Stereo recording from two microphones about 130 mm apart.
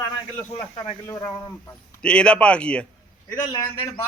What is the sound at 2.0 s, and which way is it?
Speech, 10° left (ahead or behind).